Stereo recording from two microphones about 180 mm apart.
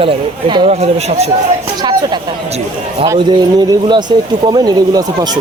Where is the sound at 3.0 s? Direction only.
25° right (ahead or behind).